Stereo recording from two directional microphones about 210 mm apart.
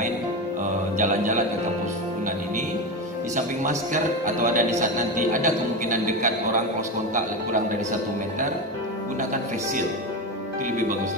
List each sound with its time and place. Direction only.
0.9 s a man's voice: 35° right (ahead or behind)
3.3 s a man's voice: 35° right (ahead or behind)